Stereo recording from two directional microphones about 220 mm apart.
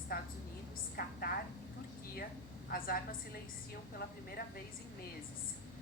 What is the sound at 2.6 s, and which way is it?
A woman's voice, 40° left (ahead or behind).